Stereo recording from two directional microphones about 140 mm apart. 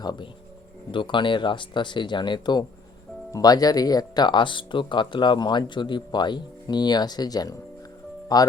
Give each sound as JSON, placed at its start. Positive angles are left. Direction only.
{"t": 0.0, "sound": "speech", "side_deg": 30}